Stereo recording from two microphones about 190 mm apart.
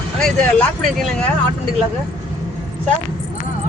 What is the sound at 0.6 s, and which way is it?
Speech, 5° left (ahead or behind).